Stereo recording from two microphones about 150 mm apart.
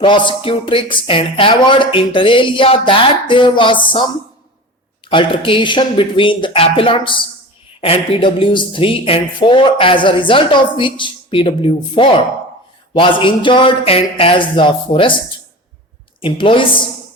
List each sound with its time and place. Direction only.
0.0 s speech: 35° left (ahead or behind)
16.2 s speech: 35° left (ahead or behind)